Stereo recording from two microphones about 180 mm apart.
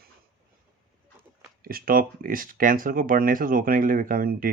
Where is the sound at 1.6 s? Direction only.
55° right (ahead or behind).